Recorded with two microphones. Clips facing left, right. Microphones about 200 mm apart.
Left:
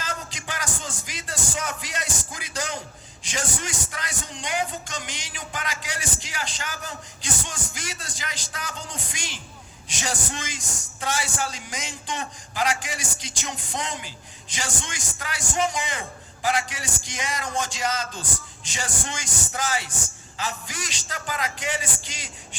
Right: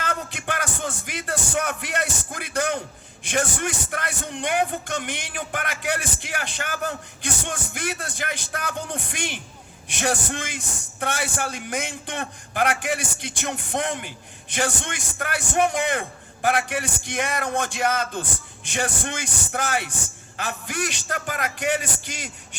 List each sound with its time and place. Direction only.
0.0 s speech: 60° right (ahead or behind)